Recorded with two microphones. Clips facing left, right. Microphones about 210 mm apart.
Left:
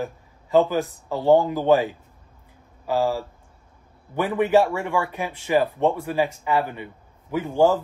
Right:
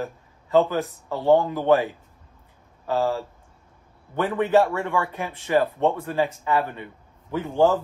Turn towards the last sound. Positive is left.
turn(degrees=10)  # may be behind; listen again after turning